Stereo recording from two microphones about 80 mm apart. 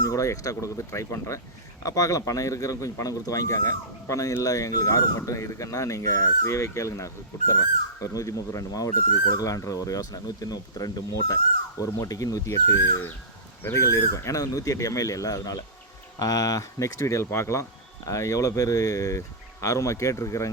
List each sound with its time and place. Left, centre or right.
0.0 s speech: left